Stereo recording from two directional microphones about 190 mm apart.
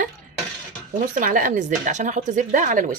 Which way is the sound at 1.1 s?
45° right (ahead or behind).